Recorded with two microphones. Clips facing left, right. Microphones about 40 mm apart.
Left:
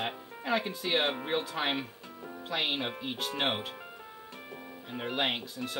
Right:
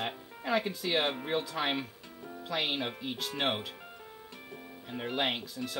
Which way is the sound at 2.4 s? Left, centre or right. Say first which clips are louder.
Left 1 dB; left.